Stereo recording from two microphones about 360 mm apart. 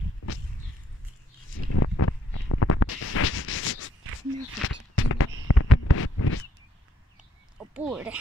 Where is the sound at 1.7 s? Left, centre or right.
Left.